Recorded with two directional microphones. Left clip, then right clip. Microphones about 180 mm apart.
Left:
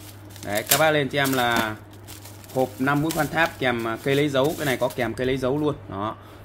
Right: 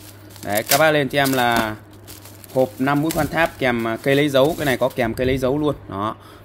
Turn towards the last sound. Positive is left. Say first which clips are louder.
# right 4 dB
turn(degrees=-50)  # may be behind; listen again after turning